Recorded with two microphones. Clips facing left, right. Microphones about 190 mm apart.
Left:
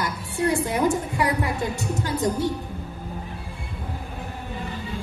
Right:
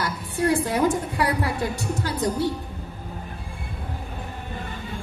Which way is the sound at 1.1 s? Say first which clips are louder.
Even; 20° left (ahead or behind).